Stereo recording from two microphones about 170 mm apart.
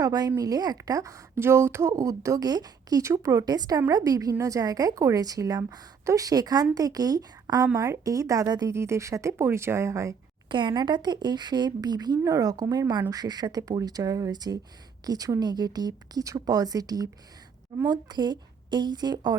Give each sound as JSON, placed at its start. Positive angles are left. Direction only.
{"t": 0.0, "sound": "a woman's voice", "side_deg": -20}